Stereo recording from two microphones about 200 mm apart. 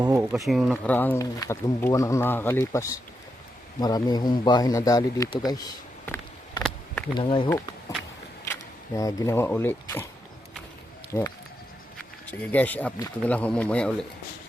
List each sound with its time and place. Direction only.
0.0 s a sound: 15° right (ahead or behind)
0.3 s speech: centre (ahead or behind)
0.9 s speech: 10° left (ahead or behind)
5.5 s a sound: 20° left (ahead or behind)
7.1 s speech: 25° left (ahead or behind)
9.0 s speech: 15° left (ahead or behind)
11.1 s speech: 5° left (ahead or behind)
12.3 s speech: 10° left (ahead or behind)